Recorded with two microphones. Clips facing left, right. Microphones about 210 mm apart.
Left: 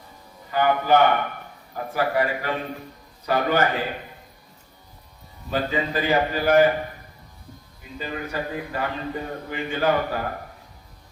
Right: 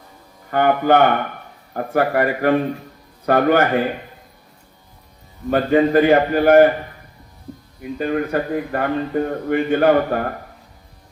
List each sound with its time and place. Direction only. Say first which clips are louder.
0.5 s speech: right 4 dB; 55° right (ahead or behind)
5.5 s speech: right 10 dB; 55° right (ahead or behind)
7.8 s speech: right 11 dB; 60° right (ahead or behind)